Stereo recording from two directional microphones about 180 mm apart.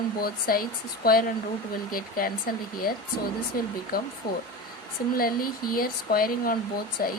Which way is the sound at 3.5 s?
55° left (ahead or behind).